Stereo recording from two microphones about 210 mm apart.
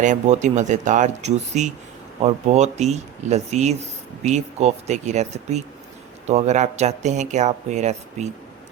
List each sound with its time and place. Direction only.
0.0 s speech: 35° right (ahead or behind)